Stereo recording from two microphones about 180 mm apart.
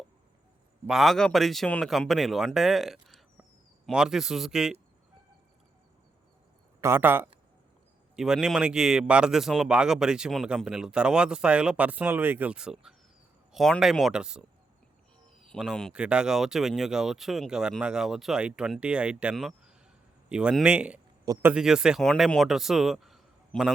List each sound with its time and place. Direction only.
0.9 s a man's voice: centre (ahead or behind)
6.8 s a man's voice: 10° right (ahead or behind)
15.4 s a man's voice: centre (ahead or behind)